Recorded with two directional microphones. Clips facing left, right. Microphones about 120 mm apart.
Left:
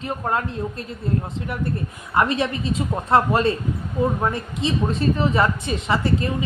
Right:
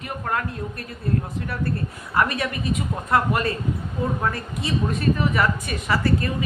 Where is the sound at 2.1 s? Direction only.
25° left (ahead or behind).